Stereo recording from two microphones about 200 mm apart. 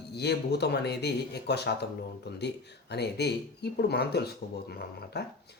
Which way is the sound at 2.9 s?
55° left (ahead or behind).